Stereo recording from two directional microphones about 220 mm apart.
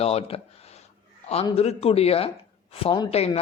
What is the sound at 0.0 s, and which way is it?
A man's voice, 25° left (ahead or behind).